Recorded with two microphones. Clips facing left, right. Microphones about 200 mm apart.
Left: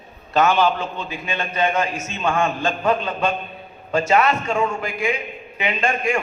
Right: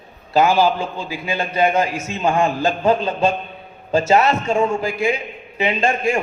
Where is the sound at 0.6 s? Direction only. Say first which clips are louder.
Right 2 dB; 10° right (ahead or behind).